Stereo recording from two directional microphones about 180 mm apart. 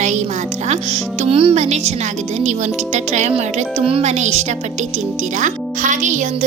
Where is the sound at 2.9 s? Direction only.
40° right (ahead or behind).